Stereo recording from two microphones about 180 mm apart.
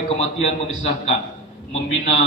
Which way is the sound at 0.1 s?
35° left (ahead or behind).